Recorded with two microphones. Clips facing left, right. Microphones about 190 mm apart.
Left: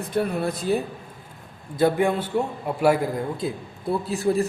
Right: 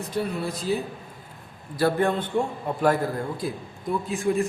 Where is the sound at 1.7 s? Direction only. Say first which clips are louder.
Left 2 dB; 15° left (ahead or behind).